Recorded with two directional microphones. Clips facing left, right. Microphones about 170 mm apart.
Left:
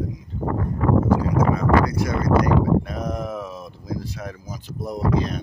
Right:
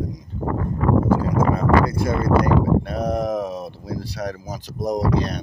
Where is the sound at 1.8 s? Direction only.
25° right (ahead or behind).